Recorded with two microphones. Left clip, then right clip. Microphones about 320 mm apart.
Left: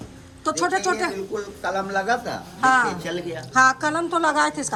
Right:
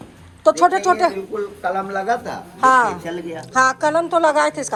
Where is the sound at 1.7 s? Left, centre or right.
Centre.